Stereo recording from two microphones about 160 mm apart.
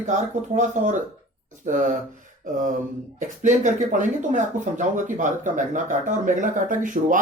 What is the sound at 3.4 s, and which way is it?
Speech, 50° right (ahead or behind).